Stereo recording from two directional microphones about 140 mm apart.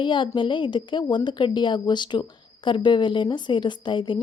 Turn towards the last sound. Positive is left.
turn(degrees=35)  # may be behind; listen again after turning